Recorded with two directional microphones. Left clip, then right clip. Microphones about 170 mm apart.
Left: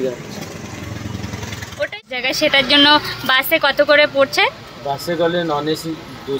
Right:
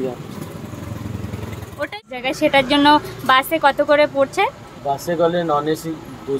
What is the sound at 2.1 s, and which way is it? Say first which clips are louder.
Speech: left 1 dB; 15° right (ahead or behind).